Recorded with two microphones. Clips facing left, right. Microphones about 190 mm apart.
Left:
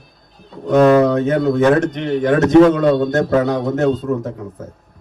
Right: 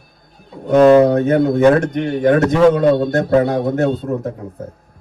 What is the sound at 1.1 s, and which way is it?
A man's voice, 55° right (ahead or behind).